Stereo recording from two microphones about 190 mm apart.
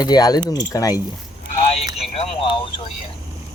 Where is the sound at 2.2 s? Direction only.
30° left (ahead or behind).